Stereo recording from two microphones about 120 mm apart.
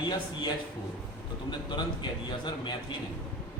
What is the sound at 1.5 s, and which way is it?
A man's voice, 40° left (ahead or behind).